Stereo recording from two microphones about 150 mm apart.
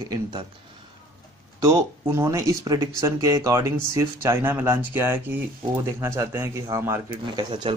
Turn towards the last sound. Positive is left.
turn(degrees=-30)  # may be behind; listen again after turning